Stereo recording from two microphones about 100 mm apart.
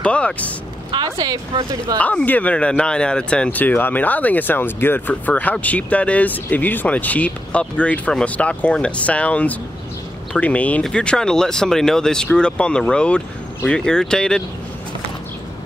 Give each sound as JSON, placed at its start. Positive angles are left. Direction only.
{"t": 0.0, "sound": "speech", "side_deg": 10}
{"t": 0.9, "sound": "speech", "side_deg": -45}
{"t": 2.0, "sound": "speech", "side_deg": 15}